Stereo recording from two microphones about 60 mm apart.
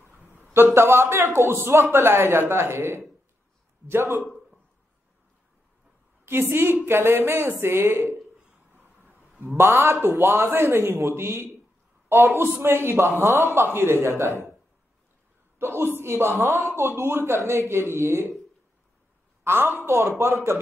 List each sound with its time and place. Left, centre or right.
0.7 s a man's voice: right
6.2 s a woman's voice: right
8.7 s vehicle: right
9.6 s a man's voice: right
12.6 s a man's voice: right
15.6 s a man's voice: right
19.4 s a woman's voice: right